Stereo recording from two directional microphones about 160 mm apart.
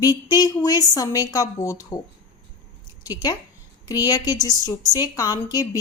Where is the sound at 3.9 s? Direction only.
25° left (ahead or behind).